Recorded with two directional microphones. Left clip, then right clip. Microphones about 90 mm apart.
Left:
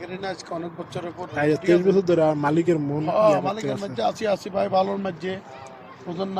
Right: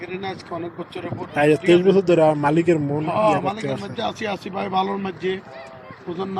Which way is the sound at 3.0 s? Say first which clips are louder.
Left 1 dB; 65° left (ahead or behind).